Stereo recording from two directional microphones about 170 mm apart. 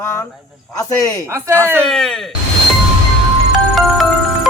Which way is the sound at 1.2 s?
15° right (ahead or behind).